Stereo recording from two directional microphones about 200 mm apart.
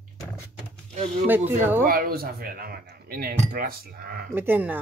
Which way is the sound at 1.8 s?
45° right (ahead or behind).